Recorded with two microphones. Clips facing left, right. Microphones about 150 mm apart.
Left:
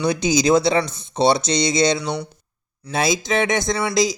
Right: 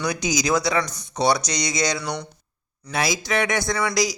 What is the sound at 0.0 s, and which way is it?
A man's voice, 25° left (ahead or behind).